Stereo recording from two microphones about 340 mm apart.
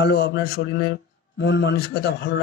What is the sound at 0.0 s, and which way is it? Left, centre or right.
A man's voice, left.